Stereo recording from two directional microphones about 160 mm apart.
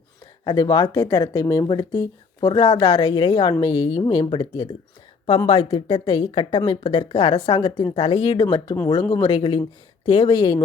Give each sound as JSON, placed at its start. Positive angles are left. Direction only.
{"t": 0.4, "sound": "speech", "side_deg": 25}